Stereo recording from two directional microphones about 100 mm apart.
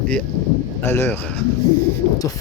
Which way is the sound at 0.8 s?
20° left (ahead or behind).